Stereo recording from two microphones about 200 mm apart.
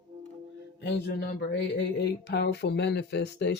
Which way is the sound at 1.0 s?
50° left (ahead or behind).